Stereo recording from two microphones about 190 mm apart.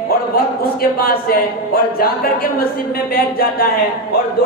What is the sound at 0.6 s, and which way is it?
Speech, 50° left (ahead or behind).